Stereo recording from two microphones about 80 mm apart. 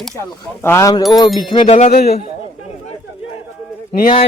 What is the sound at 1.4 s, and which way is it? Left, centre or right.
Wind chime, left.